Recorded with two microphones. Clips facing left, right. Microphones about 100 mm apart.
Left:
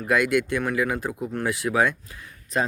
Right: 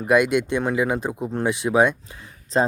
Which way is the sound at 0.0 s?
20° right (ahead or behind).